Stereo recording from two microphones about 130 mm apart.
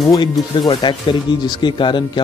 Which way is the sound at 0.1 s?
30° left (ahead or behind).